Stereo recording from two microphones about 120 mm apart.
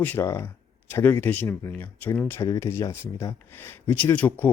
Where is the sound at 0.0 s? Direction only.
15° left (ahead or behind).